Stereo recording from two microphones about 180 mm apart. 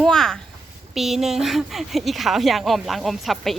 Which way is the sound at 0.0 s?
5° left (ahead or behind).